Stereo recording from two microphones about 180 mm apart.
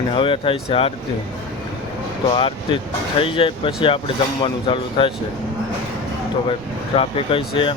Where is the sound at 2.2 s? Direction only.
30° left (ahead or behind).